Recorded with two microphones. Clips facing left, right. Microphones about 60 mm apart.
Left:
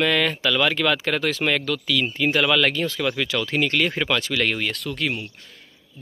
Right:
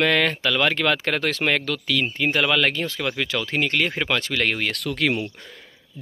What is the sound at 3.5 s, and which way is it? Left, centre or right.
Speech, right.